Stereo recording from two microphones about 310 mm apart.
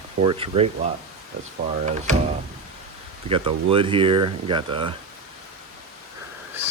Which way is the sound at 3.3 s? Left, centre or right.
Centre.